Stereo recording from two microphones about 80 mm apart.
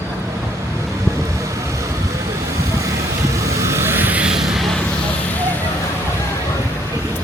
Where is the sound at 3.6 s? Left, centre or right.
Right; by 4.4 s centre.